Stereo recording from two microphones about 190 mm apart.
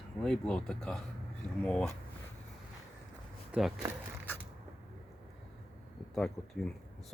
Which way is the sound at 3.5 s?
5° right (ahead or behind).